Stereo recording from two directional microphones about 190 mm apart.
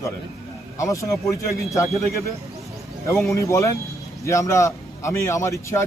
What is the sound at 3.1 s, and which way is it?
A man's voice, 15° left (ahead or behind).